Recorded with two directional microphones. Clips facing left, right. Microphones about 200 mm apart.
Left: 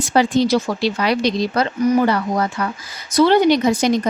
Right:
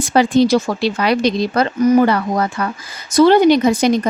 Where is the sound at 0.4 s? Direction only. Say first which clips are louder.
Right 3 dB; 50° right (ahead or behind).